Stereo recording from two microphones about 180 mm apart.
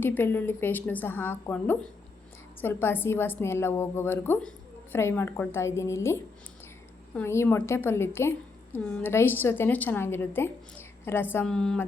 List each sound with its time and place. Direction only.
0.0 s a woman's voice: 10° left (ahead or behind)
7.2 s a woman's voice: 15° left (ahead or behind)